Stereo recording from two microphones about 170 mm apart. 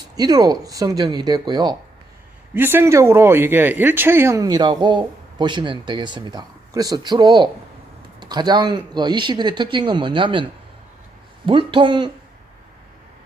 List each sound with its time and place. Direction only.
0.2 s speech: 20° right (ahead or behind)
2.6 s speech: 15° right (ahead or behind); by 10.4 s 30° right (ahead or behind)
11.4 s speech: 30° right (ahead or behind)